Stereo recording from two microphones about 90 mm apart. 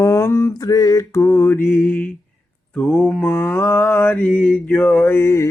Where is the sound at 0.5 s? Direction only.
40° left (ahead or behind); by 2.1 s 20° left (ahead or behind).